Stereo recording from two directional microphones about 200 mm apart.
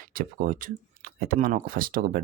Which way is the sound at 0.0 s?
45° right (ahead or behind).